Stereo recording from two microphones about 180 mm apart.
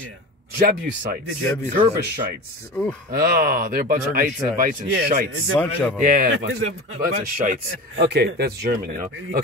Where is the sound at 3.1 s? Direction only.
55° right (ahead or behind).